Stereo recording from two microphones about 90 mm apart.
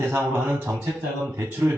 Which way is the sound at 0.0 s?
25° right (ahead or behind).